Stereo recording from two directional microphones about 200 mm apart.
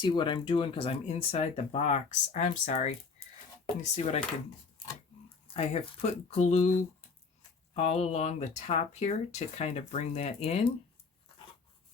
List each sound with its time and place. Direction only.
0.0 s speech: 25° left (ahead or behind)
5.5 s speech: 30° left (ahead or behind)
7.8 s speech: 30° left (ahead or behind)